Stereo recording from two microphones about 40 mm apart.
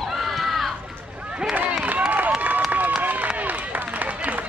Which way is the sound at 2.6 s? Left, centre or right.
Right.